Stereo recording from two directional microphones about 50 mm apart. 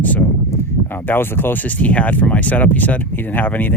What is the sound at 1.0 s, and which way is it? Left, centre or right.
Speech, left.